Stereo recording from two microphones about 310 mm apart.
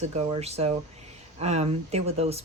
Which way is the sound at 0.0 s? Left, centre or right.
Right.